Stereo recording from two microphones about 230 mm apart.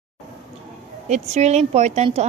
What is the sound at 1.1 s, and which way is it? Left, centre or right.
A woman's voice, right.